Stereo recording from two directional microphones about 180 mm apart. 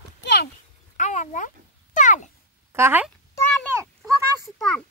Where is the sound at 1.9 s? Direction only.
45° left (ahead or behind).